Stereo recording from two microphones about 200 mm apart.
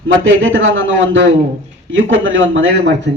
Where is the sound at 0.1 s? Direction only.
75° right (ahead or behind).